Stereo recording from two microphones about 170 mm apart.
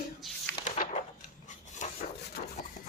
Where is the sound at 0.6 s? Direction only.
45° left (ahead or behind).